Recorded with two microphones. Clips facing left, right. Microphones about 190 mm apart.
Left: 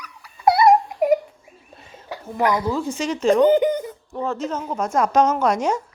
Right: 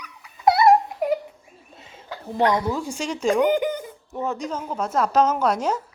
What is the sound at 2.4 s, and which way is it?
Speech, 25° right (ahead or behind).